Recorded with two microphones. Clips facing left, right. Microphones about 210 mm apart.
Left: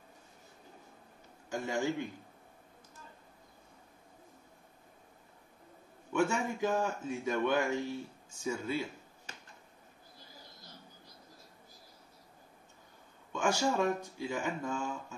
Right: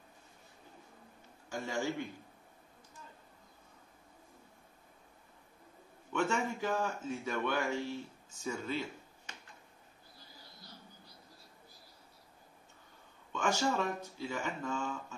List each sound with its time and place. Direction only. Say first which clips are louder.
1.5 s speech: left 3 dB; 15° left (ahead or behind)
6.1 s speech: left 2 dB; 10° left (ahead or behind)
13.3 s speech: left 2 dB; 10° left (ahead or behind)